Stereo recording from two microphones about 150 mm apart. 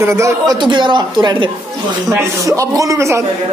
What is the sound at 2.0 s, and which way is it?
Speech, 20° right (ahead or behind).